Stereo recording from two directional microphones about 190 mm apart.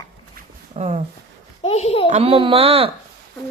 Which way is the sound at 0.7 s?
35° right (ahead or behind).